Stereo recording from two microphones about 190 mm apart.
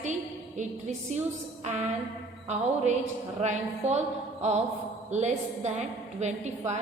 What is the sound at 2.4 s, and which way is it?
A woman's voice, 35° right (ahead or behind).